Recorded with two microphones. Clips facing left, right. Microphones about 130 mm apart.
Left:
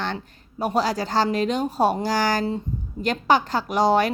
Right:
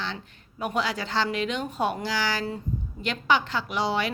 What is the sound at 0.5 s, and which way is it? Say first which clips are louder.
A woman's voice: left 5 dB; 35° left (ahead or behind).